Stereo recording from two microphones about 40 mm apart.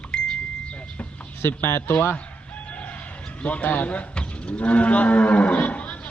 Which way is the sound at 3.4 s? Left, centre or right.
Left.